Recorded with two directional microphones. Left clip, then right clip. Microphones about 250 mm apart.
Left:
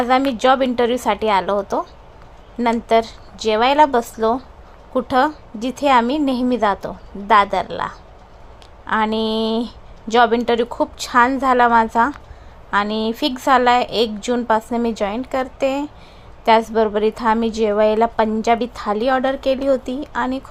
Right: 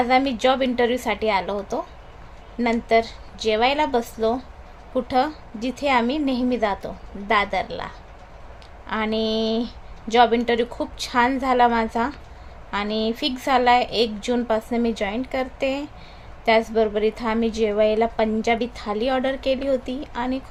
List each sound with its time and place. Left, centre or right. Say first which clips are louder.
0.0 s a woman's voice: left 3 dB; centre